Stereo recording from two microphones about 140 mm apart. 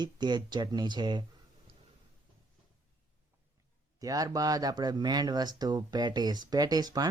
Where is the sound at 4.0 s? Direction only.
25° right (ahead or behind).